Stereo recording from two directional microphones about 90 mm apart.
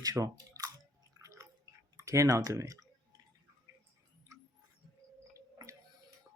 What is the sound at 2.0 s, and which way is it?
Speech, 35° right (ahead or behind).